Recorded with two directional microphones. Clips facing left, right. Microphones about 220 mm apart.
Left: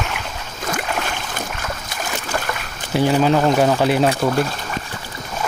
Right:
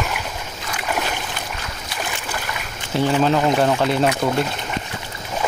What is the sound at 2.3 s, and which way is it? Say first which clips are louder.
Boat: left 5 dB; 50° left (ahead or behind).